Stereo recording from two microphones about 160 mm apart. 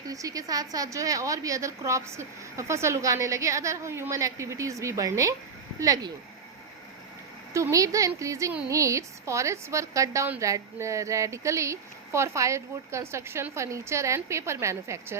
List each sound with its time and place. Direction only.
0.1 s a woman's voice: 20° right (ahead or behind)
7.5 s a woman's voice: 20° right (ahead or behind)